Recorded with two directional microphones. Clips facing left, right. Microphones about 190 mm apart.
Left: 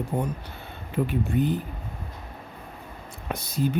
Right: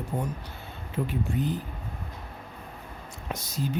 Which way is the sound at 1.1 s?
60° left (ahead or behind).